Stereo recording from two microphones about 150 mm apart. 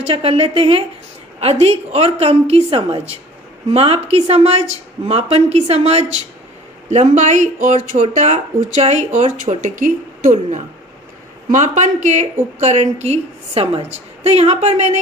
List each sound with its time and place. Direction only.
0.0 s a woman's voice: 40° right (ahead or behind)